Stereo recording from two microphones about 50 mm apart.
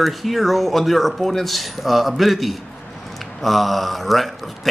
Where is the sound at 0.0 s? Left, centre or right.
Centre.